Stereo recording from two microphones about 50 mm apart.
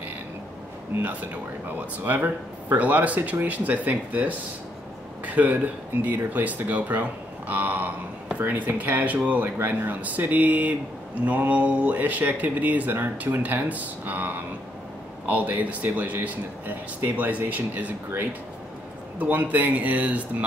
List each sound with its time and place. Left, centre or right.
1.0 s speech: right
19.1 s speech: right